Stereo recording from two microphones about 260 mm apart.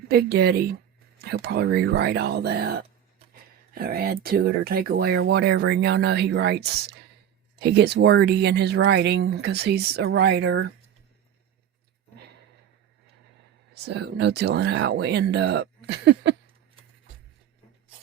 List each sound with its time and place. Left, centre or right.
0.1 s speech: right
13.8 s speech: right